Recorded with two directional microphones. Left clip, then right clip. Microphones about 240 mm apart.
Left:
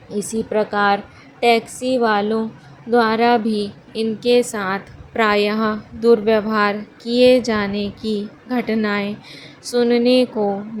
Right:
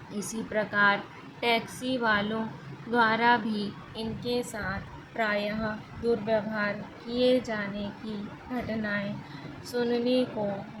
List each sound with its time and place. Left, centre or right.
0.2 s a woman's voice: left